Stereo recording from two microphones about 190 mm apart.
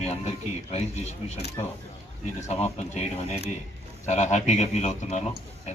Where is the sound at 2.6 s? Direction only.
35° left (ahead or behind).